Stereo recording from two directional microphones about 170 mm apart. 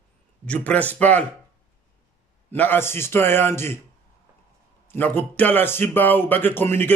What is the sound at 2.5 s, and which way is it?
A man's voice, 10° left (ahead or behind).